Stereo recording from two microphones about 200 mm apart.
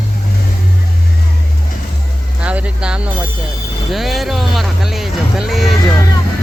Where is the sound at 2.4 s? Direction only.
5° right (ahead or behind).